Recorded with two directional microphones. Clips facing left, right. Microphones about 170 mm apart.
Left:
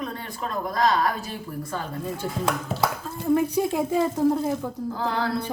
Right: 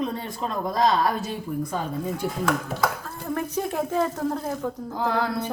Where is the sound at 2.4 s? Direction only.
30° left (ahead or behind).